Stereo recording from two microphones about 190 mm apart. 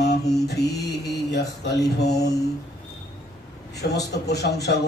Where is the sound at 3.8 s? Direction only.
60° left (ahead or behind).